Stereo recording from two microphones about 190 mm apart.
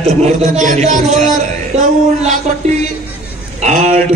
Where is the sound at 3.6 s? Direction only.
40° right (ahead or behind).